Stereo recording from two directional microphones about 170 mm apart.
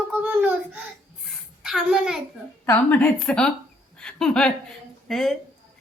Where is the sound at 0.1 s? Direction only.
10° right (ahead or behind).